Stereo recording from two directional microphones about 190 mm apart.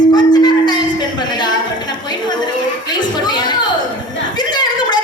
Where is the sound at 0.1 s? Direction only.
20° left (ahead or behind).